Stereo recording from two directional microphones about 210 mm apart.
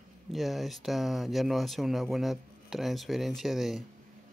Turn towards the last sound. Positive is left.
turn(degrees=0)  # may be behind; listen again after turning